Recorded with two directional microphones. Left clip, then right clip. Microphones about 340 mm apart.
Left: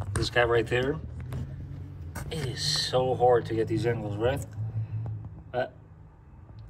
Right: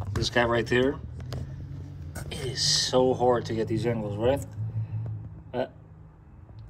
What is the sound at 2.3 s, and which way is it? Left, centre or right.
Speech, centre.